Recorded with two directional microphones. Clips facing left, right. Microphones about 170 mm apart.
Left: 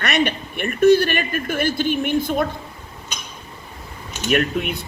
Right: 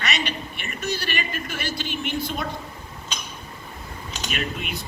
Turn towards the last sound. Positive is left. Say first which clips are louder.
# left 10 dB
turn(degrees=55)  # may be behind; listen again after turning